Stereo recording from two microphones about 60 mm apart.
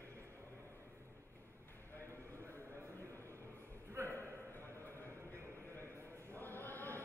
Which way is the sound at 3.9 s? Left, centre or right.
Right.